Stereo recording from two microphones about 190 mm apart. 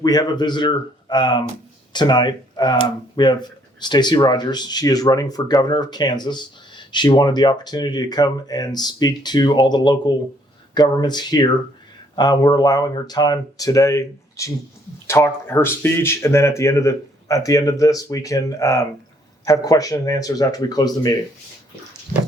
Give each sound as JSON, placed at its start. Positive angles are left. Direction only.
{"t": 0.0, "sound": "speech", "side_deg": 20}